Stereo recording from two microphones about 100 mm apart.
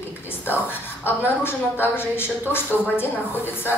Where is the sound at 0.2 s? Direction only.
20° left (ahead or behind).